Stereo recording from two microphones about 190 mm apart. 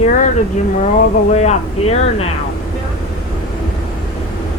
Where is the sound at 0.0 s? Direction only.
40° left (ahead or behind).